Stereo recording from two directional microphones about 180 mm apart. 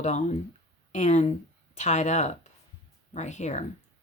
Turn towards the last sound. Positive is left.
turn(degrees=40)  # may be behind; listen again after turning